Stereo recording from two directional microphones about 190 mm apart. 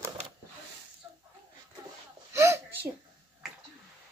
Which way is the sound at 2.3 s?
15° right (ahead or behind).